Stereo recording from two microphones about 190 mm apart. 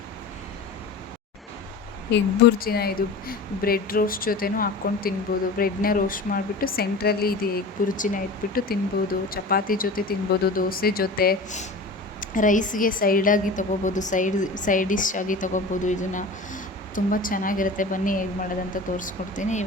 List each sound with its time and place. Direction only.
2.0 s a woman's voice: 60° left (ahead or behind); by 19.6 s 40° left (ahead or behind)